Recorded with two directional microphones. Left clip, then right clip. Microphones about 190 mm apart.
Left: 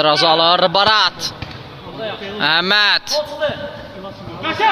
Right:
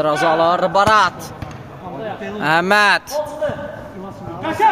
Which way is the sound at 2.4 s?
5° right (ahead or behind).